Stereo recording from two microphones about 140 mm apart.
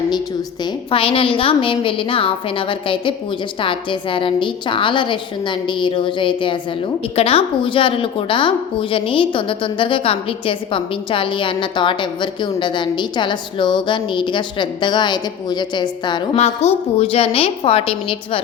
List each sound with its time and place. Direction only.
0.6 s a woman's voice: 40° left (ahead or behind)
16.3 s a woman's voice: 50° left (ahead or behind)